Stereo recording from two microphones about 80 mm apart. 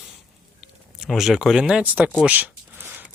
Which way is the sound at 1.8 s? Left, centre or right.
Right.